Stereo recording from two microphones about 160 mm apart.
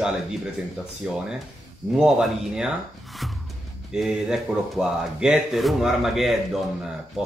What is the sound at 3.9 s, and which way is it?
A man's voice, 5° right (ahead or behind).